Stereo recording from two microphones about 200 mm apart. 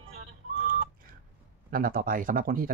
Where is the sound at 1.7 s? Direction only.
45° right (ahead or behind).